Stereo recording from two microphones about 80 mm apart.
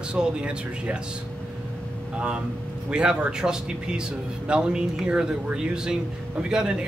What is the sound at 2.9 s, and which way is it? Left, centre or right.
Speech, centre.